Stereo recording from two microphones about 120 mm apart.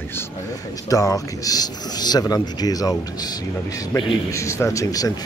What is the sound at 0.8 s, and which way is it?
Speech, 30° left (ahead or behind).